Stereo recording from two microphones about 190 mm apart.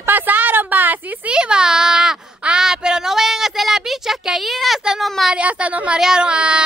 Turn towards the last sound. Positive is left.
turn(degrees=-5)  # may be behind; listen again after turning